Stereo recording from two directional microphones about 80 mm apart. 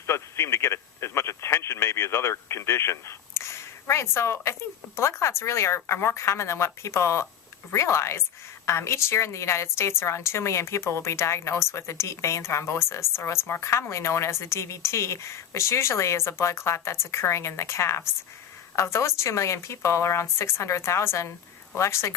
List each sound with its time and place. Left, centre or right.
0.1 s a woman's voice: left